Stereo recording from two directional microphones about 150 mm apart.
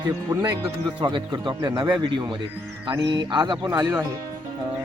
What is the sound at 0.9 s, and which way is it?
Speech, 30° right (ahead or behind).